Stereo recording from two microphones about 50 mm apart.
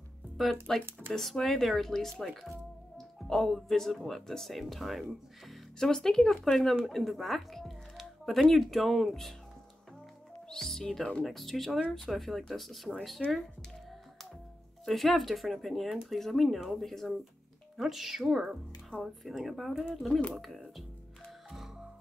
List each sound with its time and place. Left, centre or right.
0.7 s speech: centre
5.8 s speech: centre
10.5 s speech: centre
14.9 s speech: centre
18.9 s speech: left
19.2 s speech: centre
19.7 s speech: centre
20.3 s speech: centre